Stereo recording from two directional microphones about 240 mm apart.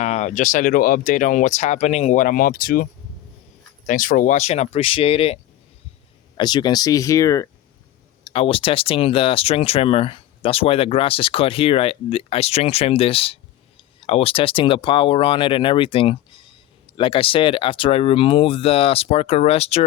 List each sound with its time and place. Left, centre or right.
0.0 s speech: left